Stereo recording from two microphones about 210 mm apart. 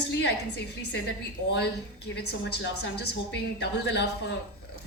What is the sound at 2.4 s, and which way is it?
A woman's voice, 55° left (ahead or behind).